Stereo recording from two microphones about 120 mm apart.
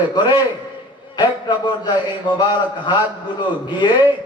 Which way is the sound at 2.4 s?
35° left (ahead or behind).